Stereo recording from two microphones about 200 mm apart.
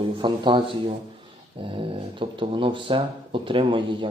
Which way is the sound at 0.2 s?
25° right (ahead or behind).